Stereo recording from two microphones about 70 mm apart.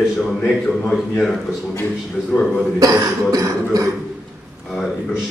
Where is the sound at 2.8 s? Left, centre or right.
Right.